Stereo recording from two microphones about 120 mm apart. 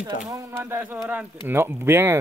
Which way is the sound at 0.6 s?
20° right (ahead or behind).